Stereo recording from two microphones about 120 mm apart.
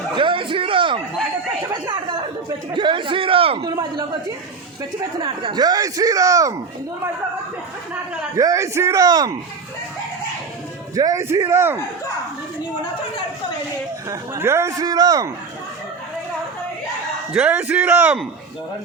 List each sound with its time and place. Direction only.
0.2 s a sound: 45° right (ahead or behind)
3.6 s speech: 30° right (ahead or behind)
5.2 s speech: 45° right (ahead or behind); by 6.6 s 30° right (ahead or behind)
8.4 s a man's voice: 25° right (ahead or behind)
10.9 s a man's voice: 30° right (ahead or behind)
14.1 s a man's voice: 20° right (ahead or behind)
17.3 s a man's voice: 10° right (ahead or behind)